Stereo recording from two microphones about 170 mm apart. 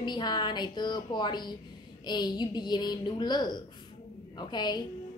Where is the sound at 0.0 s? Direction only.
25° left (ahead or behind).